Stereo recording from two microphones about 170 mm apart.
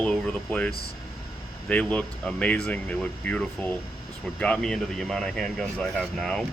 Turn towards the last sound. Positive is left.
turn(degrees=5)  # may be behind; listen again after turning